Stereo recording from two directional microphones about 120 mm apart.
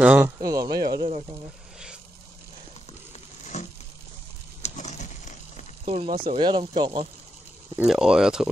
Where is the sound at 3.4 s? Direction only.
80° left.